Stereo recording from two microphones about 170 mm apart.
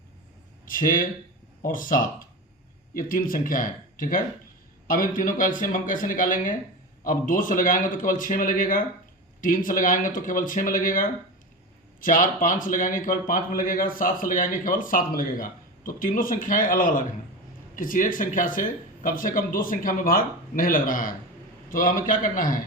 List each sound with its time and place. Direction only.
0.6 s a man's voice: 55° left (ahead or behind)